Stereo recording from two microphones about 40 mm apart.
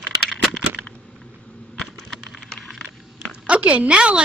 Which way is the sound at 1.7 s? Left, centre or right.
Centre.